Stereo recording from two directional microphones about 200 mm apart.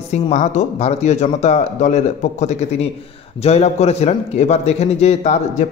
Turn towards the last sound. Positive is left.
turn(degrees=35)  # may be behind; listen again after turning